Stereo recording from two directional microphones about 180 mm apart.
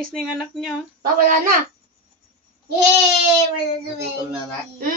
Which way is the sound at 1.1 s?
50° right (ahead or behind).